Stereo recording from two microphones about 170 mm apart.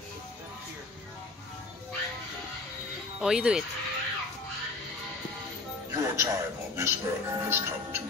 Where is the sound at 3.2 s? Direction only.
5° right (ahead or behind).